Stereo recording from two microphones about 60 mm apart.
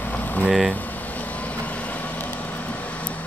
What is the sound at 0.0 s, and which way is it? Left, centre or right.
Boiling, left.